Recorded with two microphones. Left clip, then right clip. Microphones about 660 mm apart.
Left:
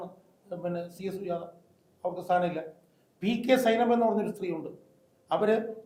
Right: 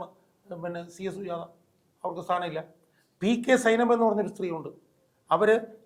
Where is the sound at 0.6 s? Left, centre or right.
Right.